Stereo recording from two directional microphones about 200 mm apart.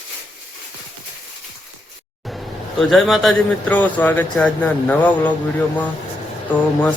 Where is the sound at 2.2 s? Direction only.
Centre (ahead or behind).